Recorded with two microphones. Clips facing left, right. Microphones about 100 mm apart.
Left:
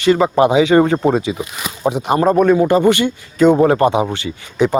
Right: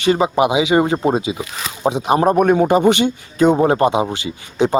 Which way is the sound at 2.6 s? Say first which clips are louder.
Left 1 dB; 15° right (ahead or behind).